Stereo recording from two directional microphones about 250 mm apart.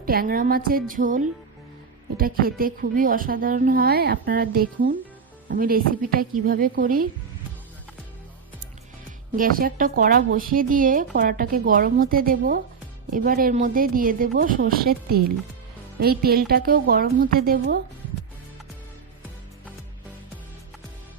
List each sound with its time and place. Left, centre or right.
0.0 s a woman's voice: right
9.3 s a woman's voice: right